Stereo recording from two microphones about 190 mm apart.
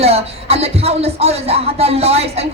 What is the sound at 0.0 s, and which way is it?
A man's voice, 35° right (ahead or behind).